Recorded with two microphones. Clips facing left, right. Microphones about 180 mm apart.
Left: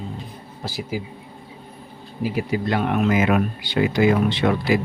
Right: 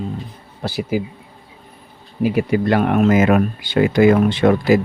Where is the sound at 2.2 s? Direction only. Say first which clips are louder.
Right 6 dB; 60° right (ahead or behind).